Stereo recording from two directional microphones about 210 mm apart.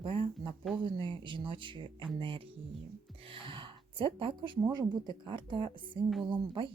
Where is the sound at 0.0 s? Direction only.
25° right (ahead or behind).